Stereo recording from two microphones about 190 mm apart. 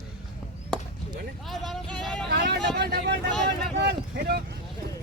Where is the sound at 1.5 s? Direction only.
Centre (ahead or behind).